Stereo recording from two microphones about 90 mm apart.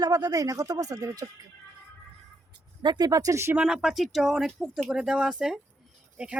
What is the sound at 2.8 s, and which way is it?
Speech, 50° right (ahead or behind).